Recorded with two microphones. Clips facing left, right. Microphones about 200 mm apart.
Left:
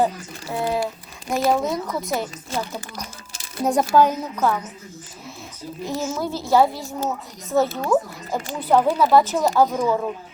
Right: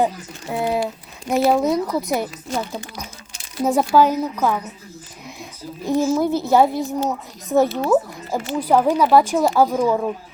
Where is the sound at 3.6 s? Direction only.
Centre (ahead or behind).